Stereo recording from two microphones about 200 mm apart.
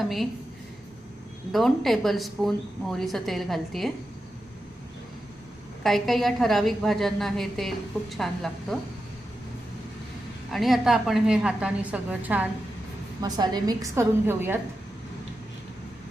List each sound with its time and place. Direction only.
0.0 s a woman's voice: centre (ahead or behind)
1.5 s a woman's voice: centre (ahead or behind)
5.8 s a woman's voice: centre (ahead or behind)
10.5 s a woman's voice: centre (ahead or behind)
13.2 s a woman's voice: 20° right (ahead or behind)